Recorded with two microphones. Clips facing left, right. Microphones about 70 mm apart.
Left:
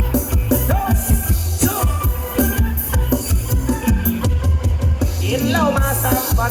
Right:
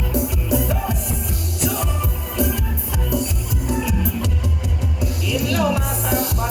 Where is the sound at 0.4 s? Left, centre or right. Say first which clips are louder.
Left 4 dB; left.